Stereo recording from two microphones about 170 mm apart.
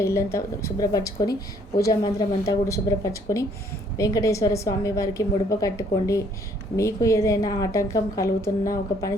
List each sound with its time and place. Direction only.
0.0 s a woman's voice: 15° left (ahead or behind)
2.4 s a woman's voice: 15° left (ahead or behind)